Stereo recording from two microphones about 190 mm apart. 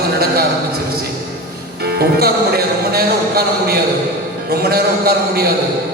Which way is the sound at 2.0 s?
55° right (ahead or behind).